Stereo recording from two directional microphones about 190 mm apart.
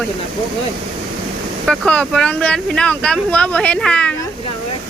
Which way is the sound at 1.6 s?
5° left (ahead or behind).